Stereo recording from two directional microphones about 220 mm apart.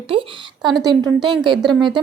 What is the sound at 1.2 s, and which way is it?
Speech, 20° right (ahead or behind).